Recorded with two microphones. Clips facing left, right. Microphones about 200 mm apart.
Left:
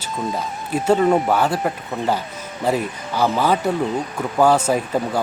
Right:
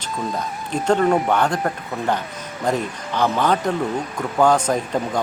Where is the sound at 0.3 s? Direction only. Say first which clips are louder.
Left 1 dB; 5° left (ahead or behind).